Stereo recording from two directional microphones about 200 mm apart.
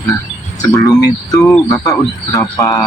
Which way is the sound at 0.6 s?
15° left (ahead or behind).